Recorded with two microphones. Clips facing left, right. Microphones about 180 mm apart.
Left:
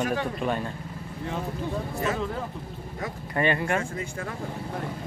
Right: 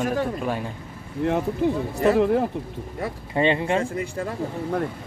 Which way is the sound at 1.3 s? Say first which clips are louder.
Right 9 dB; 70° right (ahead or behind).